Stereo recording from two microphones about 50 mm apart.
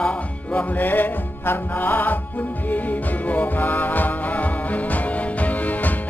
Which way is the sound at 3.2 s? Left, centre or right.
Left.